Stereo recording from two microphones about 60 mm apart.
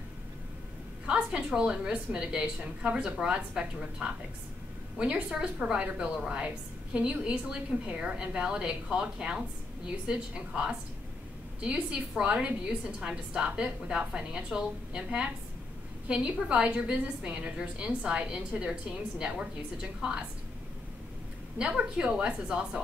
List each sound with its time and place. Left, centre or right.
1.0 s a woman's voice: centre
21.5 s a woman's voice: centre